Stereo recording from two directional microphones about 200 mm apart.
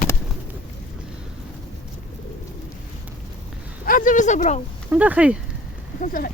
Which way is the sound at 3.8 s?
40° left (ahead or behind).